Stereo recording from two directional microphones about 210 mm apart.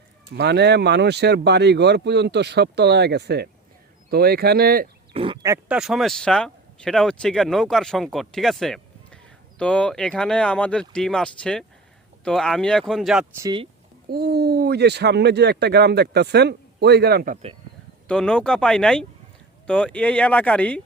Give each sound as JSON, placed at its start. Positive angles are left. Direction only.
{"t": 0.3, "sound": "speech", "side_deg": -55}
{"t": 5.1, "sound": "speech", "side_deg": -25}
{"t": 5.6, "sound": "speech", "side_deg": -5}
{"t": 13.4, "sound": "speech", "side_deg": -20}
{"t": 14.1, "sound": "speech", "side_deg": -50}
{"t": 18.1, "sound": "speech", "side_deg": 5}